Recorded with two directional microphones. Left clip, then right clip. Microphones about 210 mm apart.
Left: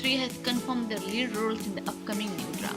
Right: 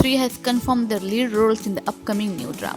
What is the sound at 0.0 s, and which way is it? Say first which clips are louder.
Speech: right 8 dB; 50° right (ahead or behind).